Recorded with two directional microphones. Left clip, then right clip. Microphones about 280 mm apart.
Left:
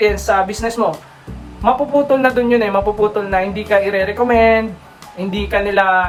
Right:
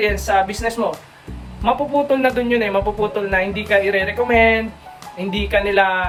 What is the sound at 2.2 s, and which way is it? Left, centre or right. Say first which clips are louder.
Speech: left 4 dB; centre.